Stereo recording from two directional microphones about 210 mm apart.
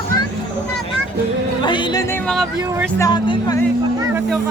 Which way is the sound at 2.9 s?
20° left (ahead or behind).